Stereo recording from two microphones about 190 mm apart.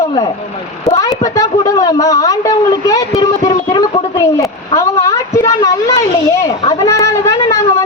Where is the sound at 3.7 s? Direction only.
20° left (ahead or behind).